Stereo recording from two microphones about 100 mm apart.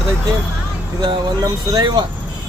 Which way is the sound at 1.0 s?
40° right (ahead or behind).